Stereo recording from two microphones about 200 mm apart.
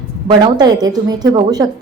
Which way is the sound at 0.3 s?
20° right (ahead or behind).